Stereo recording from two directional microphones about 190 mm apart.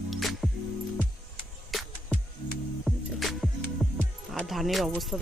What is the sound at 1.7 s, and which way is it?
Music, centre (ahead or behind).